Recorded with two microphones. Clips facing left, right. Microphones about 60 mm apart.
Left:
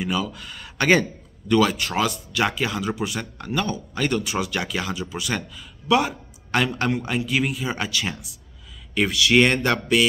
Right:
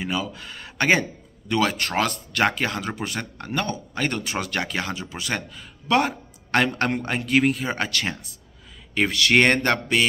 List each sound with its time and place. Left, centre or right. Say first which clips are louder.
0.0 s a man's voice: left 2 dB; right
9.2 s a man's voice: even; right